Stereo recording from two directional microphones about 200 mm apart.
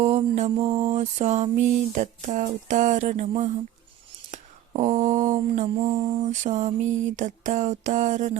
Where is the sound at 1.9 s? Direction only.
35° right (ahead or behind).